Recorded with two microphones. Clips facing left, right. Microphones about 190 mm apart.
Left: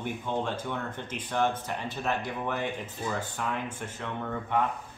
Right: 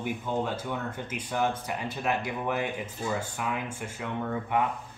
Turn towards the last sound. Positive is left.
turn(degrees=-10)  # may be behind; listen again after turning